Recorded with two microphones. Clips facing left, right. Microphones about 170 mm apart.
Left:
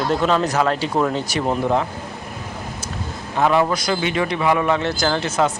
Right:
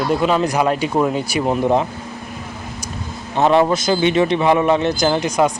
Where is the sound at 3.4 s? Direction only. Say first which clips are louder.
Right 3 dB; 25° right (ahead or behind).